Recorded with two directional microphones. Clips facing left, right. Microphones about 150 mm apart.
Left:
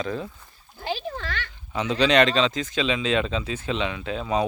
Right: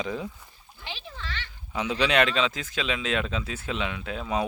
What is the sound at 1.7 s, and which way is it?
A man's voice, 10° right (ahead or behind).